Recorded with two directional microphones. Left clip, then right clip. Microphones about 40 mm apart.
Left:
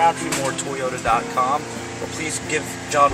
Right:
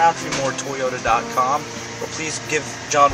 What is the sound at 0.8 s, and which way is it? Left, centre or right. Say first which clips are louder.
Speech: right 1 dB; centre.